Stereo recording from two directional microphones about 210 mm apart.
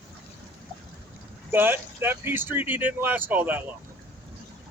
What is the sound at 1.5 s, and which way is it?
Speech, 10° right (ahead or behind).